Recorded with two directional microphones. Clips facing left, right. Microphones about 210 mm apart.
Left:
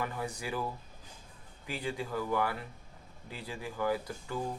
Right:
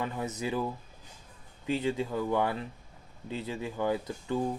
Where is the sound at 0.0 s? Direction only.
20° right (ahead or behind).